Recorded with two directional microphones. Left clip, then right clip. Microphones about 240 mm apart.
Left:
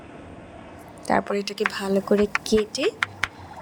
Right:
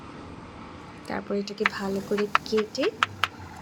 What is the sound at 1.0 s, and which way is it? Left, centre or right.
Speech, left.